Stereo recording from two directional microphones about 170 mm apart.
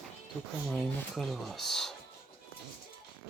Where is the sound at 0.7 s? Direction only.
Centre (ahead or behind).